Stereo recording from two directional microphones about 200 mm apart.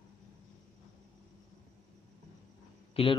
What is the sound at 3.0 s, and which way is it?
Speech, 30° left (ahead or behind).